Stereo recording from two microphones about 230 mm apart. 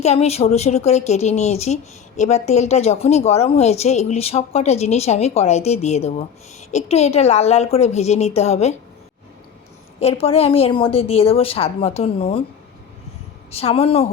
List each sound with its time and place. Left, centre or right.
0.0 s a woman's voice: left
10.0 s a woman's voice: left
13.5 s a woman's voice: left